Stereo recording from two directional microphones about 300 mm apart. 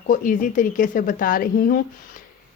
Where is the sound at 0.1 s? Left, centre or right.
Left.